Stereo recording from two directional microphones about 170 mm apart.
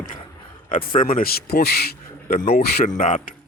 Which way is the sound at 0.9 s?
55° left (ahead or behind).